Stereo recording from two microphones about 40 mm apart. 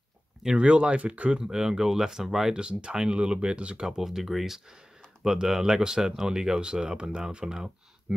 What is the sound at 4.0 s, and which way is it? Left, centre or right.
Speech, centre.